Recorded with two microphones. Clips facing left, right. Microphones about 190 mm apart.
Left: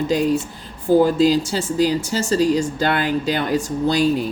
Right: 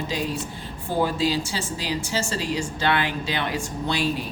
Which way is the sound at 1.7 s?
45° left (ahead or behind).